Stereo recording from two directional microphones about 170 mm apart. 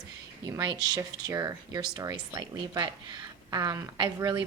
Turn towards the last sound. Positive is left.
turn(degrees=-25)  # may be behind; listen again after turning